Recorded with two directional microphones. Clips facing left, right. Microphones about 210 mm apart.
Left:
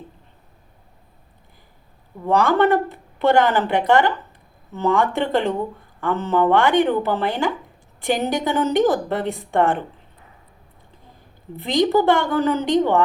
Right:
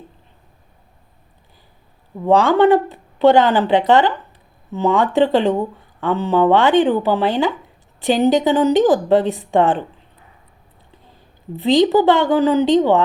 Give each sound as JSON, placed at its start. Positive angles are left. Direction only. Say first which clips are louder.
{"t": 2.2, "sound": "speech", "louder": "right 4 dB", "side_deg": -15}
{"t": 11.8, "sound": "speech", "louder": "right 2 dB", "side_deg": -20}